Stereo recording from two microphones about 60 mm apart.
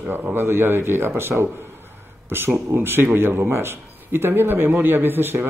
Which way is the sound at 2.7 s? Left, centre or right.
Right.